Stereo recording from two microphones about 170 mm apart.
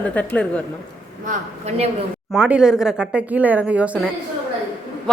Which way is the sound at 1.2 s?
45° right (ahead or behind).